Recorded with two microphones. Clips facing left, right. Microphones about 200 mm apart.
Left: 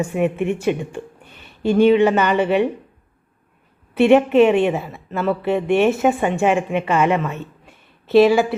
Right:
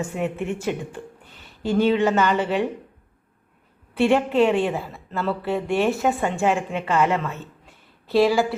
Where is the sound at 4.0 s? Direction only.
20° left (ahead or behind).